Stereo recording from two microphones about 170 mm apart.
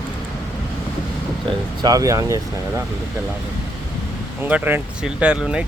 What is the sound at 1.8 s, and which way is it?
Speech, 20° right (ahead or behind).